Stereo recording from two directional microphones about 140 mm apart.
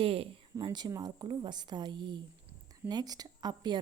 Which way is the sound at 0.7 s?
30° right (ahead or behind).